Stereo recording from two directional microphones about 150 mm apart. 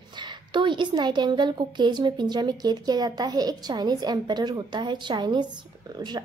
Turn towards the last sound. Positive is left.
turn(degrees=-30)  # may be behind; listen again after turning